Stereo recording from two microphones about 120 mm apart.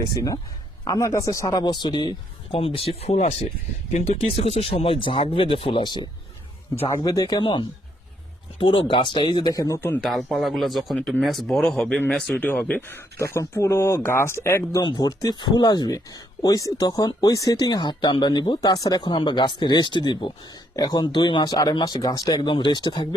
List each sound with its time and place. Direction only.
0.9 s speech: 25° left (ahead or behind)
2.6 s speech: 50° left (ahead or behind); by 9.8 s 30° left (ahead or behind)
10.0 s speech: centre (ahead or behind); by 14.8 s 20° left (ahead or behind)
14.8 s speech: 35° left (ahead or behind)